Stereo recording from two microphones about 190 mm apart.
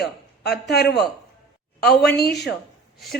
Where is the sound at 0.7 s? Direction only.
60° left (ahead or behind).